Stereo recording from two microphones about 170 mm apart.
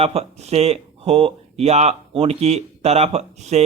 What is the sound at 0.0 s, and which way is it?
Speech, 35° right (ahead or behind).